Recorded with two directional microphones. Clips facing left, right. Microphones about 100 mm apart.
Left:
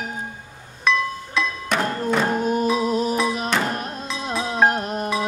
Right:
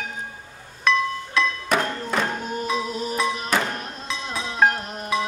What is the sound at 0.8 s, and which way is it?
Music, centre (ahead or behind).